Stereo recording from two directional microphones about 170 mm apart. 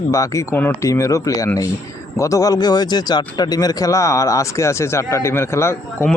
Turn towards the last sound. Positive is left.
turn(degrees=15)  # may be behind; listen again after turning